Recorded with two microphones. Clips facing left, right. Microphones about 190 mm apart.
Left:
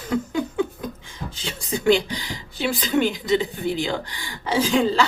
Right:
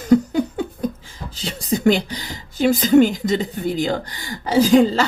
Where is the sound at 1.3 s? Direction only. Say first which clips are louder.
Right 6 dB; 40° right (ahead or behind).